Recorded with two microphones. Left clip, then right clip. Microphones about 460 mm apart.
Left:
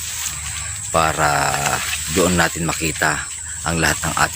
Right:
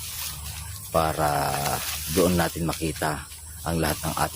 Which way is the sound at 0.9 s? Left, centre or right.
Left.